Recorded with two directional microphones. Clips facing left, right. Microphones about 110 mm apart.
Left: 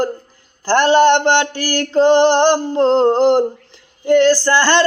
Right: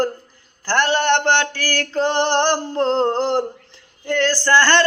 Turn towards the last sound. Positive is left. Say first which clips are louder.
# left 2 dB
turn(degrees=15)  # may be behind; listen again after turning